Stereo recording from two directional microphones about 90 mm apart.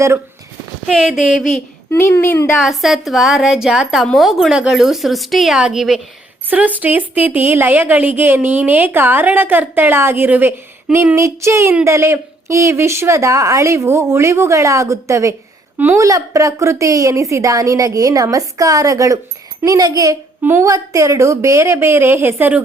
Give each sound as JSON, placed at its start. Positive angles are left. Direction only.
{"t": 0.9, "sound": "a woman's voice", "side_deg": -5}
{"t": 1.9, "sound": "a woman's voice", "side_deg": 30}
{"t": 2.6, "sound": "a woman's voice", "side_deg": -5}
{"t": 6.5, "sound": "a woman's voice", "side_deg": -20}
{"t": 20.4, "sound": "a woman's voice", "side_deg": -30}